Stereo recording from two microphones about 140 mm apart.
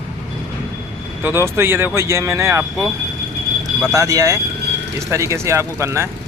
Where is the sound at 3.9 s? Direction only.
25° right (ahead or behind).